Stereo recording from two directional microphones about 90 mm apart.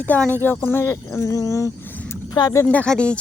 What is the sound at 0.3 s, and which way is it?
Speech, 20° left (ahead or behind).